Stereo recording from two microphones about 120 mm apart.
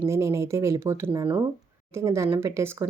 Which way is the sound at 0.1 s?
25° right (ahead or behind).